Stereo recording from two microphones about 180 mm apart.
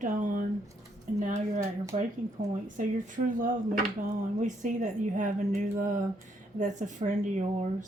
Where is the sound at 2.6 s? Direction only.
45° right (ahead or behind).